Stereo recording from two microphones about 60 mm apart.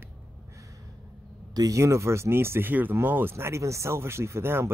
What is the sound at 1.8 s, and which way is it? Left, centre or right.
Speech, right.